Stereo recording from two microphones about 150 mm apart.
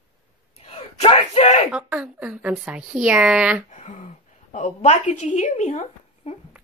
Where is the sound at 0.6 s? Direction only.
40° left (ahead or behind).